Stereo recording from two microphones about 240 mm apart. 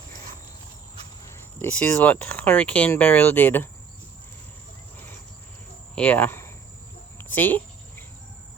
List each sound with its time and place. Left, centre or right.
1.3 s speech: centre
5.9 s speech: centre
7.3 s a sound: centre